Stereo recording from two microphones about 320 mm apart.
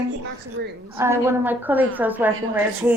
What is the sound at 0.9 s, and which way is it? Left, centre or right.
Speech, centre.